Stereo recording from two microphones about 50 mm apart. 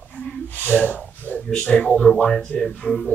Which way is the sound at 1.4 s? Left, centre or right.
Centre.